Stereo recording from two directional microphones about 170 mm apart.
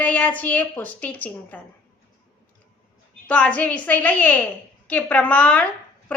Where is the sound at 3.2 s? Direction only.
10° left (ahead or behind).